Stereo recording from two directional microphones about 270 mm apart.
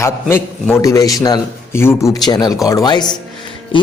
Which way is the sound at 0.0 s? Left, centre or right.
Centre.